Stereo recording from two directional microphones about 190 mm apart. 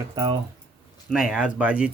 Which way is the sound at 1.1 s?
5° right (ahead or behind).